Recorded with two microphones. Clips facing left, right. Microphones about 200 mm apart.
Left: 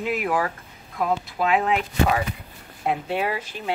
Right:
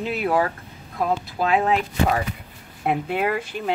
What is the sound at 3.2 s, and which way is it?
Speech, 55° right (ahead or behind).